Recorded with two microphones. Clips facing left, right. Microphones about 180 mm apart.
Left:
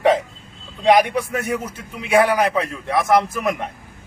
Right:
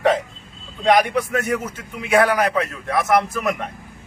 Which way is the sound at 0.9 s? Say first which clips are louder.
Left 1 dB; 10° left (ahead or behind).